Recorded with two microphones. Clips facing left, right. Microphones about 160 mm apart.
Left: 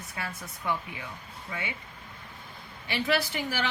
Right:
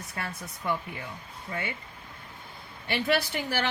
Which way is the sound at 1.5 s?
45° right (ahead or behind).